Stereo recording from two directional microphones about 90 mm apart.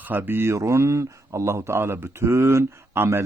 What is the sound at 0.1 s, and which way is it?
Speech, 20° right (ahead or behind).